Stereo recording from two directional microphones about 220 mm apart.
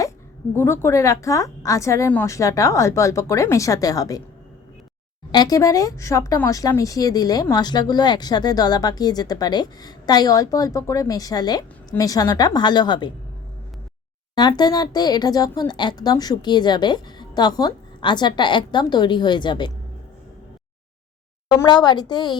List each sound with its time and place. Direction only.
0.5 s speech: 10° left (ahead or behind)
5.3 s speech: 15° left (ahead or behind)
14.3 s speech: 20° left (ahead or behind)
21.5 s speech: 15° left (ahead or behind)